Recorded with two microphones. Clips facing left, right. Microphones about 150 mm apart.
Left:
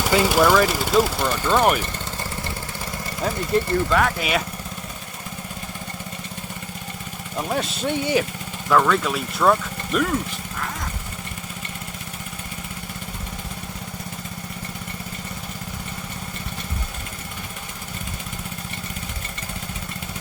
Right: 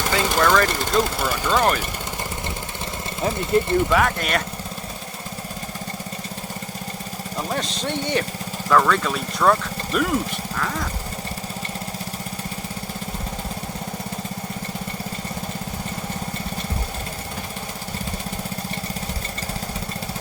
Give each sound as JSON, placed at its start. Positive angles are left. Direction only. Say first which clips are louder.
{"t": 0.0, "sound": "speech", "louder": "left 3 dB", "side_deg": 10}
{"t": 3.2, "sound": "speech", "louder": "right 2 dB", "side_deg": -20}
{"t": 3.9, "sound": "speech", "louder": "even", "side_deg": 0}
{"t": 7.5, "sound": "speech", "louder": "left 3 dB", "side_deg": 5}